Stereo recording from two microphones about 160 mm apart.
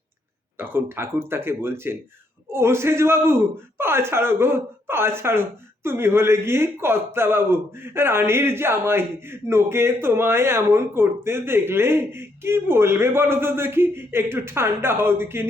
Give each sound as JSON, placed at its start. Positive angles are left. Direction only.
{"t": 0.5, "sound": "a man's voice", "side_deg": -15}